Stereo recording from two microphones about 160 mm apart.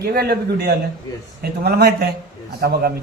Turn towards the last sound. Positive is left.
turn(degrees=-75)  # may be behind; listen again after turning